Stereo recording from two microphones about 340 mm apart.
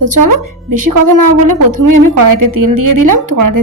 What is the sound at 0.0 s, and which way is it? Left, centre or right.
A woman's voice, right.